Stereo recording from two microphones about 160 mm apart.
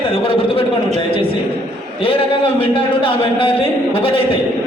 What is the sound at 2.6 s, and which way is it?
A man's voice, 35° left (ahead or behind).